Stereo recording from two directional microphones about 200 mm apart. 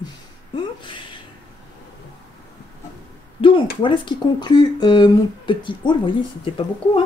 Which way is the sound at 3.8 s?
25° left (ahead or behind).